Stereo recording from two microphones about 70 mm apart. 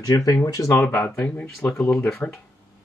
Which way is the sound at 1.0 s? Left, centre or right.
Centre.